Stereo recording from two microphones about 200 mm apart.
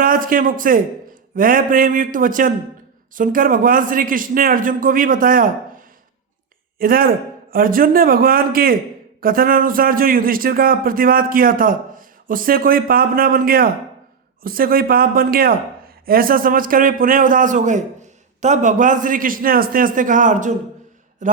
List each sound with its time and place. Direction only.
0.0 s a man's voice: 45° right (ahead or behind)